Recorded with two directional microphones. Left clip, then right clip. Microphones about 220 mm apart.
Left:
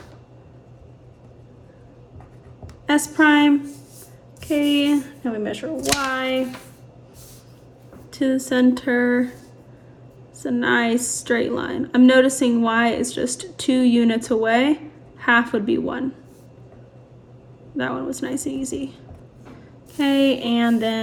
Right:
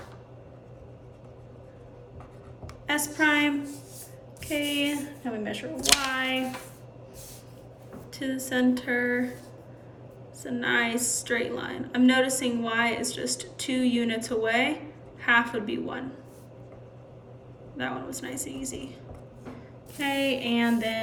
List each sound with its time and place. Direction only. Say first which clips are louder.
3.2 s a woman's voice: left 8 dB; 10° left (ahead or behind)
8.1 s a woman's voice: left 9 dB; 15° left (ahead or behind)
10.4 s a woman's voice: left 6 dB; 15° left (ahead or behind)
17.7 s a woman's voice: left 8 dB; 15° left (ahead or behind)
20.0 s a woman's voice: left 8 dB; 15° left (ahead or behind)